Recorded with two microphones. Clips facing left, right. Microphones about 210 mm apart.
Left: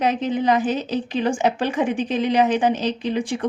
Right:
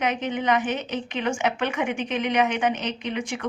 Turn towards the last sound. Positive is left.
turn(degrees=35)  # may be behind; listen again after turning